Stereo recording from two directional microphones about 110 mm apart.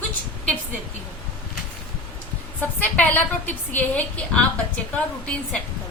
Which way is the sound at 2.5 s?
15° left (ahead or behind).